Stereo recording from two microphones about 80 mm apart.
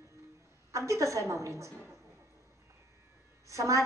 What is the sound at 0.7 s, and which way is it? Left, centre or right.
A woman's voice, right.